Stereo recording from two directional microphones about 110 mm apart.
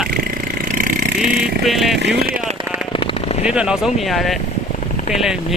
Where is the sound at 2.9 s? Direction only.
55° left (ahead or behind).